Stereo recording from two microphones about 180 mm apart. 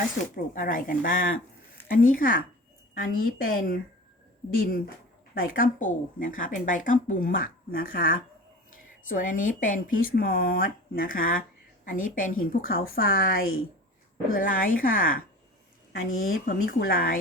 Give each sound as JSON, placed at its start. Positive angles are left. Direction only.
{"t": 0.3, "sound": "speech", "side_deg": 50}
{"t": 16.5, "sound": "speech", "side_deg": 55}